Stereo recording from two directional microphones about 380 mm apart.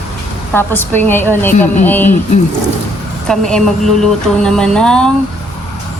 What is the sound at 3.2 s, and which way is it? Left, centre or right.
Speech, centre.